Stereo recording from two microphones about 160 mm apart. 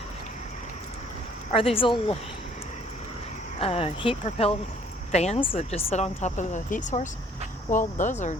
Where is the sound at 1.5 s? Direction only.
35° left (ahead or behind).